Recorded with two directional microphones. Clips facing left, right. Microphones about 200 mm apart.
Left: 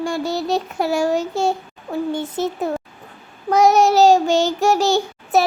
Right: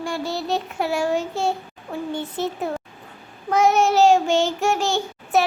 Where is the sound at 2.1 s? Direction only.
45° left (ahead or behind).